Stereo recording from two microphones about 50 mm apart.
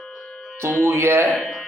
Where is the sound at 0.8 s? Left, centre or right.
Right.